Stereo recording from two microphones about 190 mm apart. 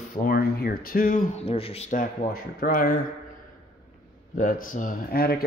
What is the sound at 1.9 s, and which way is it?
Speech, 45° left (ahead or behind).